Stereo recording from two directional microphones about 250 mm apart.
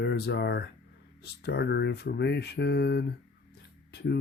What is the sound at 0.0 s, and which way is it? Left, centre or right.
Speech, left.